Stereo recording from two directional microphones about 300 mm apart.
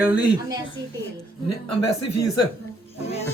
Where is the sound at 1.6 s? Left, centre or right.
Left.